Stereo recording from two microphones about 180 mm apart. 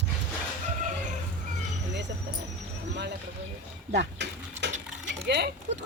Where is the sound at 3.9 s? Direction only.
75° right (ahead or behind).